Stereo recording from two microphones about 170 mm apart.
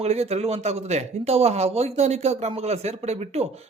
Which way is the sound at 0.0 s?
40° right (ahead or behind).